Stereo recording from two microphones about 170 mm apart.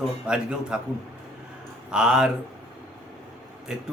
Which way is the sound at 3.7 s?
5° right (ahead or behind).